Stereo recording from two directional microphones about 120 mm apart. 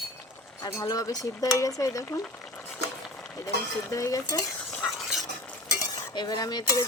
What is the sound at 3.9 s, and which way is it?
Speech, 30° left (ahead or behind).